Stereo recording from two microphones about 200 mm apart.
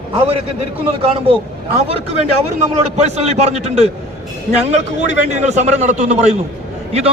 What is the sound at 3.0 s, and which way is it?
Speech, 35° right (ahead or behind).